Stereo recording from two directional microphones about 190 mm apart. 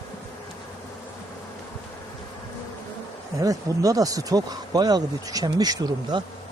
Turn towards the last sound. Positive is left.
turn(degrees=-20)  # may be behind; listen again after turning